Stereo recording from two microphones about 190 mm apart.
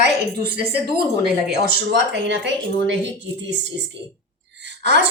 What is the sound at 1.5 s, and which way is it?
Speech, 65° right (ahead or behind).